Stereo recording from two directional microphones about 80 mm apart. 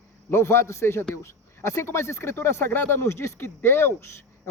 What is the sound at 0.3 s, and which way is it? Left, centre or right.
Speech, left.